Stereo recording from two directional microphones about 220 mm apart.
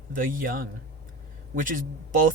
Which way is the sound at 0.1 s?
40° right (ahead or behind).